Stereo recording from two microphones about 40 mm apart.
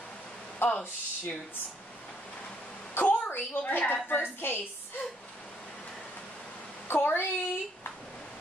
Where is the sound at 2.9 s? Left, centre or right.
Left.